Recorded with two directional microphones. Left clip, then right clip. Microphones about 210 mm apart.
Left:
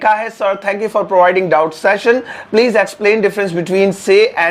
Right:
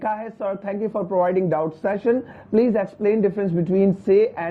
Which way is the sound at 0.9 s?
25° left (ahead or behind).